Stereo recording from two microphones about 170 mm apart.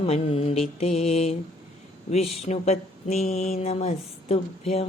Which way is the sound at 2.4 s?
40° left (ahead or behind).